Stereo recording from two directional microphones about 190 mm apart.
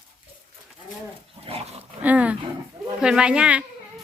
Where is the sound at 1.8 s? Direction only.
5° right (ahead or behind).